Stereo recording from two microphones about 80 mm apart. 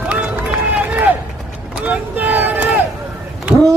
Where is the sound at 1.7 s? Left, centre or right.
Centre.